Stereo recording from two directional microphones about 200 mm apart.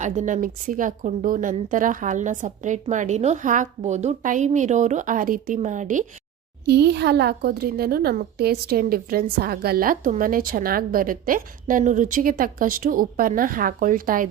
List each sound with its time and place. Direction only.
0.0 s a woman's voice: 35° right (ahead or behind)
6.7 s a woman's voice: 55° right (ahead or behind)